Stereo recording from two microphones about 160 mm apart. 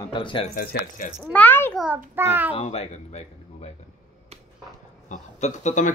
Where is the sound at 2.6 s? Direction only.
45° left (ahead or behind).